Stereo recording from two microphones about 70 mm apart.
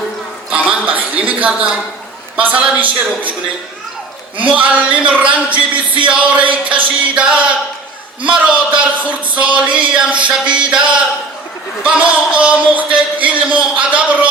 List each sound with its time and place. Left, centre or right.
0.7 s a sound: right
2.4 s a man's voice: right
4.4 s a man's voice: centre